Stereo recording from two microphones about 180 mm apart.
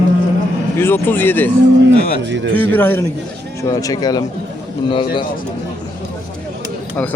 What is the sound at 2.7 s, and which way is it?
Speech, 10° left (ahead or behind).